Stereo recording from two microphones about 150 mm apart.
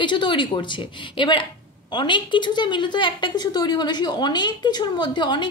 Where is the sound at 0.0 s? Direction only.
30° left (ahead or behind).